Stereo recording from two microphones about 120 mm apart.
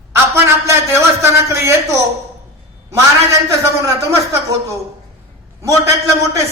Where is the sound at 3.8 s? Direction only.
25° right (ahead or behind).